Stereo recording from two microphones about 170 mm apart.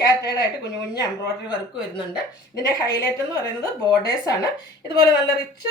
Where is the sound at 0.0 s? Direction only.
20° left (ahead or behind).